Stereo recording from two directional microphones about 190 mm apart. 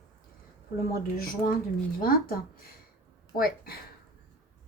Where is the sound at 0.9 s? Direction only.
50° left (ahead or behind).